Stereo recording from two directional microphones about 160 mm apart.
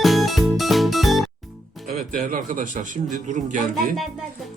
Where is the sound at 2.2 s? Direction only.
55° right (ahead or behind).